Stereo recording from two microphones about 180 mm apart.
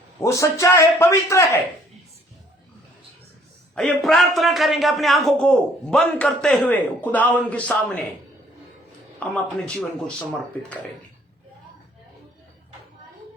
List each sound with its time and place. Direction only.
0.2 s a man's voice: 15° left (ahead or behind)
3.8 s a man's voice: centre (ahead or behind)
9.2 s a man's voice: 5° left (ahead or behind)